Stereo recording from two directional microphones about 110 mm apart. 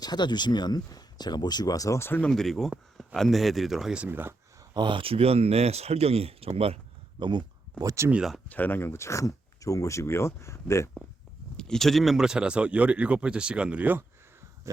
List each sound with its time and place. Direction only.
0.0 s speech: 40° left (ahead or behind); by 2.2 s 20° left (ahead or behind)
2.2 s speech: 5° left (ahead or behind); by 4.4 s 20° right (ahead or behind)
4.7 s speech: 45° right (ahead or behind); by 6.5 s 65° right (ahead or behind)
7.2 s a sound: 45° right (ahead or behind)
7.9 s speech: 25° right (ahead or behind)
8.1 s speech: 5° right (ahead or behind)
8.4 s speech: 15° left (ahead or behind)
11.5 s speech: 5° left (ahead or behind); by 14.0 s 15° right (ahead or behind)